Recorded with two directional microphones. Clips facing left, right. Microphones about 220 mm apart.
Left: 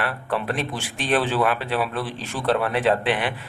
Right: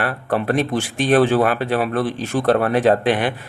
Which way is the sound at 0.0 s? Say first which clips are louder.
Right 5 dB; 45° right (ahead or behind).